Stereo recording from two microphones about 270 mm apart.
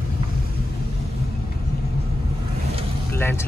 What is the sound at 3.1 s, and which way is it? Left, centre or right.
Vehicle, centre.